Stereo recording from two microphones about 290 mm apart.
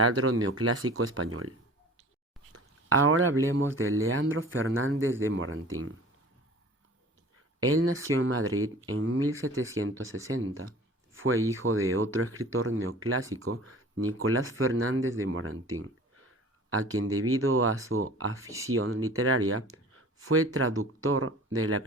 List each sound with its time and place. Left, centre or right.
0.0 s speech: right
2.5 s a sound: right
3.5 s speech: right
7.6 s speech: right
11.1 s a sound: right
11.9 s speech: right
18.4 s speech: centre
18.7 s speech: right